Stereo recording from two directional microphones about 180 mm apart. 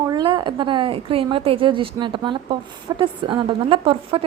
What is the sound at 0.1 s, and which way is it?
A woman's voice, 25° right (ahead or behind).